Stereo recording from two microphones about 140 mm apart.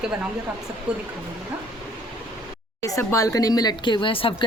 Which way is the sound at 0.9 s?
5° right (ahead or behind).